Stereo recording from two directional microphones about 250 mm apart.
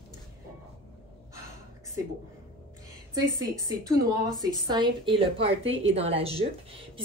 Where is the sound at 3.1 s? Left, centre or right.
Centre.